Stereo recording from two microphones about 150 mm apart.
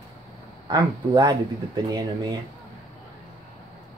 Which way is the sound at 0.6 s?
30° right (ahead or behind).